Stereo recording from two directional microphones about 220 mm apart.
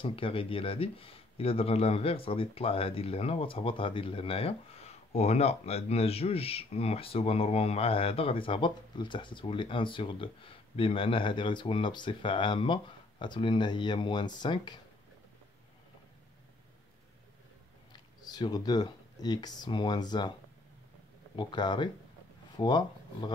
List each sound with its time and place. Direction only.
0.0 s speech: 25° left (ahead or behind)
18.2 s speech: 20° left (ahead or behind)
21.4 s speech: 20° left (ahead or behind)